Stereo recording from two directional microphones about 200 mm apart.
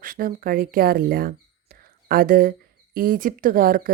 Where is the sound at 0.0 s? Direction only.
45° right (ahead or behind).